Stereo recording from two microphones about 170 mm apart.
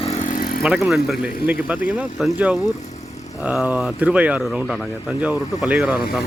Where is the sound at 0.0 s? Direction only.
45° left (ahead or behind).